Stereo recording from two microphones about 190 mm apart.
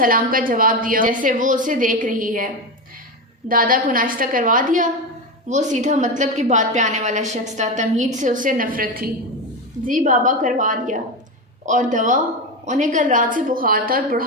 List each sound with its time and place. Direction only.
0.0 s a woman's voice: 50° right (ahead or behind)
3.5 s a woman's voice: 45° right (ahead or behind)